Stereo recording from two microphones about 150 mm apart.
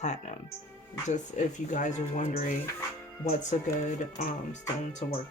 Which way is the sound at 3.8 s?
55° left (ahead or behind).